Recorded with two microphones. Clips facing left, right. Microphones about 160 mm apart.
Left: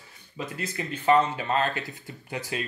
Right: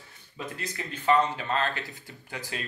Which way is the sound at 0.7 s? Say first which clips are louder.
Left 2 dB; 20° left (ahead or behind).